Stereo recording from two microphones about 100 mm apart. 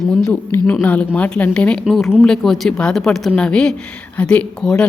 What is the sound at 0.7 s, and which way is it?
A woman's voice, 15° left (ahead or behind).